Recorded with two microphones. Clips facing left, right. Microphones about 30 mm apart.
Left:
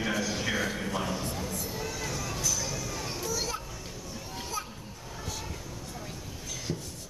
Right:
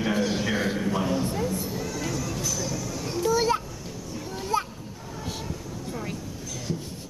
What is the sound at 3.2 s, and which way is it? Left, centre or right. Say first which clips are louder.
Children playing: right 12 dB; right.